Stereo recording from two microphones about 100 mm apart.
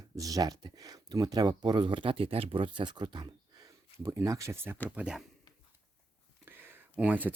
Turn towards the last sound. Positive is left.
turn(degrees=-15)  # may be behind; listen again after turning